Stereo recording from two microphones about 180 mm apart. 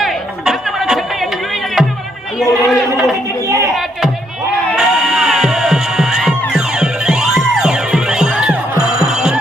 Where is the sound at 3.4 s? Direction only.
15° right (ahead or behind).